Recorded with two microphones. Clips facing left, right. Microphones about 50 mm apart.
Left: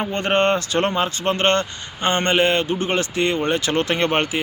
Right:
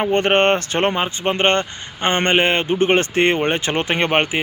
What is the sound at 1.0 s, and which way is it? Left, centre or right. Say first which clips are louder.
A man's voice: right 1 dB; centre.